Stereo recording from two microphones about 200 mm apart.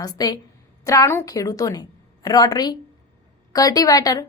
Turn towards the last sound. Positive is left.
turn(degrees=15)  # may be behind; listen again after turning